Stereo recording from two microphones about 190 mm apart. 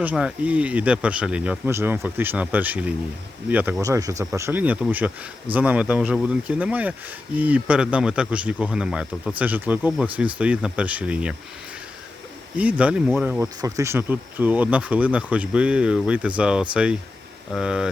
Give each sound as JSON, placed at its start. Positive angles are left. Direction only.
{"t": 0.0, "sound": "speech", "side_deg": -5}
{"t": 12.5, "sound": "speech", "side_deg": -5}